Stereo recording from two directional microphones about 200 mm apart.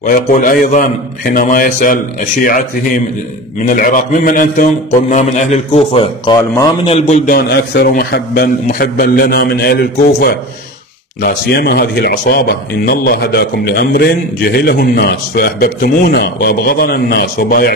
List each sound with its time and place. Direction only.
0.0 s speech: 40° left (ahead or behind)
3.6 s a man's voice: 40° left (ahead or behind)
7.2 s speech: 55° left (ahead or behind)